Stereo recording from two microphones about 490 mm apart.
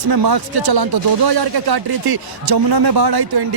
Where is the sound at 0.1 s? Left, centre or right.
Right.